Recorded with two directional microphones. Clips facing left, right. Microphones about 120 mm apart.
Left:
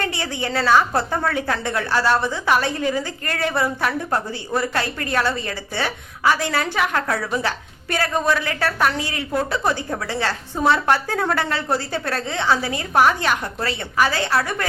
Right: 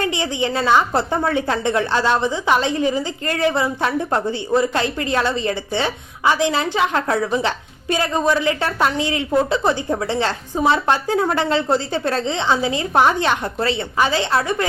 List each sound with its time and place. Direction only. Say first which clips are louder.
0.0 s a woman's voice: right 4 dB; 20° right (ahead or behind)